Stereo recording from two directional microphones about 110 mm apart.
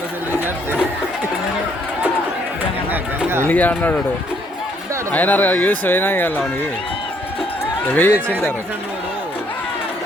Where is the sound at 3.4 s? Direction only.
15° left (ahead or behind).